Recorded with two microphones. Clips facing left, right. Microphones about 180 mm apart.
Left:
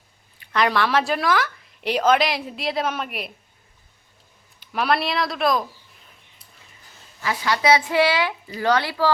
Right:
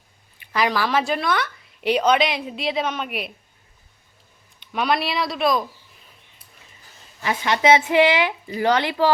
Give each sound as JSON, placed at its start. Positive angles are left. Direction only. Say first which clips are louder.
{"t": 0.5, "sound": "a woman's voice", "louder": "left 1 dB", "side_deg": -5}
{"t": 4.6, "sound": "a woman's voice", "louder": "even", "side_deg": 0}
{"t": 7.2, "sound": "a woman's voice", "louder": "right 2 dB", "side_deg": -20}